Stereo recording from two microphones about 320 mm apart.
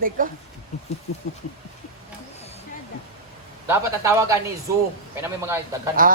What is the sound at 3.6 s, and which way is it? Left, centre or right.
Speech, centre.